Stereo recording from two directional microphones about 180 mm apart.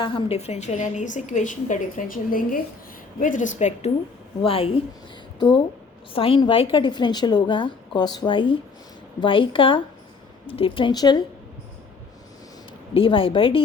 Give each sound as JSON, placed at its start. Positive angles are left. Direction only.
{"t": 0.0, "sound": "a woman's voice", "side_deg": 30}
{"t": 6.1, "sound": "a woman's voice", "side_deg": 30}
{"t": 12.9, "sound": "a woman's voice", "side_deg": 30}